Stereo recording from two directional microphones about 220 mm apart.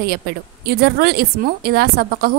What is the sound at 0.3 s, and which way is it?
A woman's voice, 45° right (ahead or behind).